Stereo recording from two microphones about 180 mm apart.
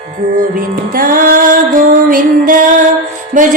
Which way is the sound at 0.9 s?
50° right (ahead or behind).